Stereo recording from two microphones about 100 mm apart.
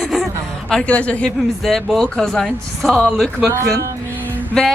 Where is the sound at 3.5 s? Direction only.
30° right (ahead or behind).